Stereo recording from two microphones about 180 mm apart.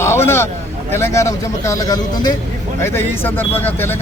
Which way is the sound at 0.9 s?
15° left (ahead or behind).